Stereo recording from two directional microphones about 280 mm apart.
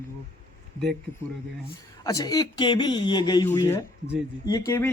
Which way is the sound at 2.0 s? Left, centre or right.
Centre.